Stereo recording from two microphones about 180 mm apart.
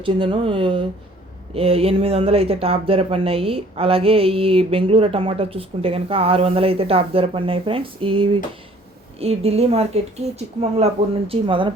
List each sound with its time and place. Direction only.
0.0 s speech: 30° right (ahead or behind)